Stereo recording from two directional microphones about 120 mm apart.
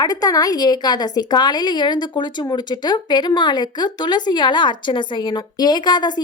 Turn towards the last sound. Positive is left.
turn(degrees=35)  # may be behind; listen again after turning